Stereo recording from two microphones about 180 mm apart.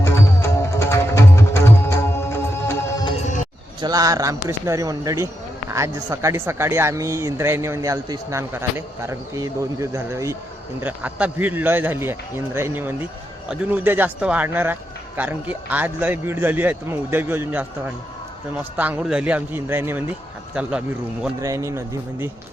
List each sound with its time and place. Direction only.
0.0 s music: 15° left (ahead or behind)
3.8 s speech: 20° right (ahead or behind); by 20.8 s 5° right (ahead or behind)
21.4 s speech: 15° right (ahead or behind)